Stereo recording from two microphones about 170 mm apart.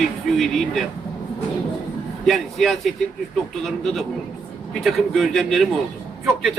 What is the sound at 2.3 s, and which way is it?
Speech, centre (ahead or behind).